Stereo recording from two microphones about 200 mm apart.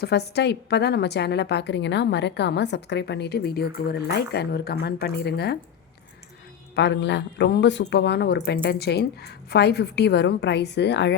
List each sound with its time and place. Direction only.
0.0 s speech: 55° left (ahead or behind)
6.7 s speech: 60° left (ahead or behind)